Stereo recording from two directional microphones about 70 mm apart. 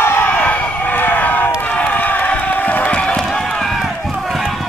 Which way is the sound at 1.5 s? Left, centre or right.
Left.